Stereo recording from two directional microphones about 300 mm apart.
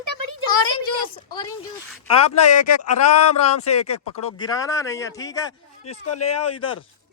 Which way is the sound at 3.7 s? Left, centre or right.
Left.